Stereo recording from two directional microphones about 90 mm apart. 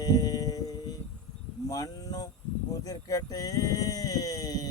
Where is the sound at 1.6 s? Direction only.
45° left (ahead or behind).